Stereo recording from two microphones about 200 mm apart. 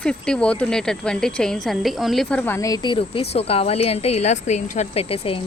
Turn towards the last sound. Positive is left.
turn(degrees=30)  # may be behind; listen again after turning